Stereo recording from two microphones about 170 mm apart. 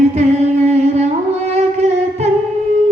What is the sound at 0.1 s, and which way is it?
Singing, 40° right (ahead or behind).